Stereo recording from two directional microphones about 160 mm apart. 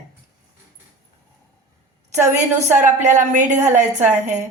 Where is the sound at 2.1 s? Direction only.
45° right (ahead or behind).